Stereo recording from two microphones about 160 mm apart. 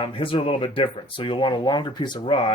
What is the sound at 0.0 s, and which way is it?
Speech, 35° left (ahead or behind).